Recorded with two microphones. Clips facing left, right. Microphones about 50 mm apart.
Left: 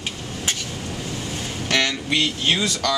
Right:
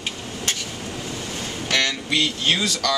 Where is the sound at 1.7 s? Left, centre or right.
Centre.